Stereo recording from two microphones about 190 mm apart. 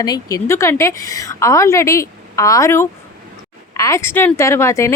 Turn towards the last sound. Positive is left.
turn(degrees=15)  # may be behind; listen again after turning